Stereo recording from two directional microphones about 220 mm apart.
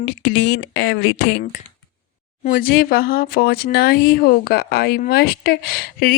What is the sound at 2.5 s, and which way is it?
Speech, 40° left (ahead or behind).